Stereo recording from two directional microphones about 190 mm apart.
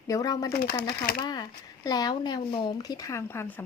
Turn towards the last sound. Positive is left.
turn(degrees=10)  # may be behind; listen again after turning